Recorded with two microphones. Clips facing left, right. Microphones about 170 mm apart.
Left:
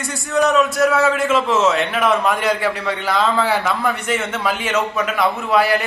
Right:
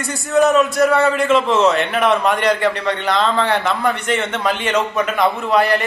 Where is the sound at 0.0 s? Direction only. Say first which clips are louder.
Right 3 dB; centre (ahead or behind).